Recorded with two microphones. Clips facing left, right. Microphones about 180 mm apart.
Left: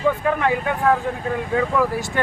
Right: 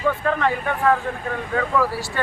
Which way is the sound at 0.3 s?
15° left (ahead or behind).